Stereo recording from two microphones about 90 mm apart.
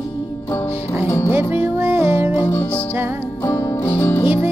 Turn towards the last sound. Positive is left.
turn(degrees=20)  # may be behind; listen again after turning